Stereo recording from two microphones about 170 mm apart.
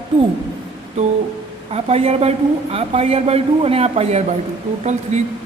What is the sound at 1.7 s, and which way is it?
A woman's voice, 35° right (ahead or behind).